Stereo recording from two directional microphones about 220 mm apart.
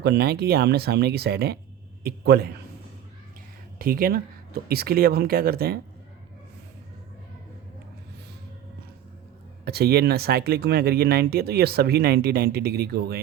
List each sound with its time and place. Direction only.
0.0 s speech: 45° right (ahead or behind)
3.8 s speech: 40° right (ahead or behind)
9.6 s speech: 45° right (ahead or behind)